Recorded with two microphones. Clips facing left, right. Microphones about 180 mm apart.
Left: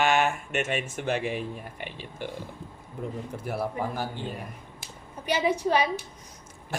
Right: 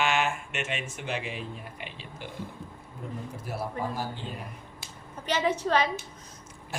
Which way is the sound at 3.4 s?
60° left (ahead or behind).